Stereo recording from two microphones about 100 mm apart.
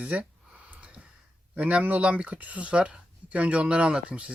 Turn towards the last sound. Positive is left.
turn(degrees=-10)  # may be behind; listen again after turning